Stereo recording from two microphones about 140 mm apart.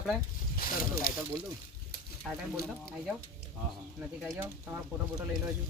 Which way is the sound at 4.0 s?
15° right (ahead or behind).